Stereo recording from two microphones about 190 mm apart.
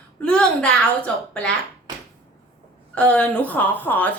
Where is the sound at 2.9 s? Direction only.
5° left (ahead or behind).